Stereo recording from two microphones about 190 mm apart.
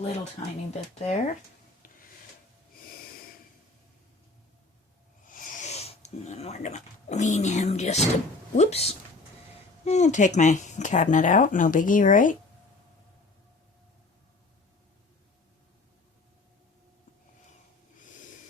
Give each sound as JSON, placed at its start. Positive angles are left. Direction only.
{"t": 0.0, "sound": "speech", "side_deg": 35}
{"t": 5.2, "sound": "speech", "side_deg": 45}